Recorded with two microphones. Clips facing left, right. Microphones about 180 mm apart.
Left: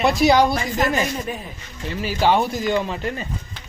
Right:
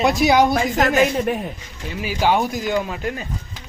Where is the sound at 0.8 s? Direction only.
75° right (ahead or behind).